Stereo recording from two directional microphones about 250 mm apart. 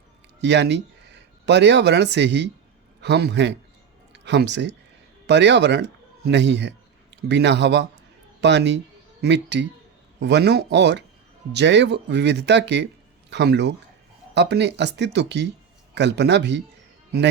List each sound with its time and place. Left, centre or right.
0.4 s a man's voice: right